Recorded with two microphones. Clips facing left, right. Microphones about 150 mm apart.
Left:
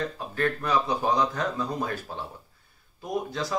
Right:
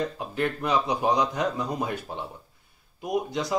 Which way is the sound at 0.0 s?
15° right (ahead or behind).